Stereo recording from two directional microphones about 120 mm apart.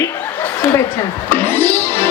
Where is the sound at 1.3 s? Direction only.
20° left (ahead or behind).